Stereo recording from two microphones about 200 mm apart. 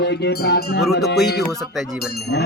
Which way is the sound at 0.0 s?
60° left (ahead or behind).